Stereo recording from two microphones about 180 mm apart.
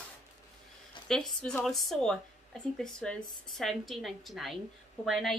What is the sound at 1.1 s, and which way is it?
A woman's voice, 5° left (ahead or behind).